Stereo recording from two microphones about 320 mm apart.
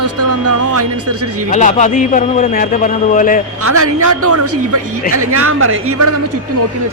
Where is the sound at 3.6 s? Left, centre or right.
Right.